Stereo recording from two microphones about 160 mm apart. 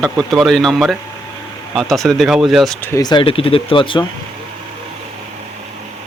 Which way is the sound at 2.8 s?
20° left (ahead or behind).